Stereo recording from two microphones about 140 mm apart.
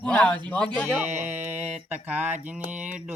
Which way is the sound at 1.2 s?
15° right (ahead or behind).